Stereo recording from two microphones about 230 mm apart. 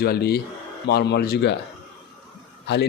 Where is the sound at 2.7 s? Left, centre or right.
Left.